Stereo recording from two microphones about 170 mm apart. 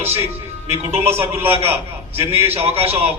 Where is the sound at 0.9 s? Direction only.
15° right (ahead or behind).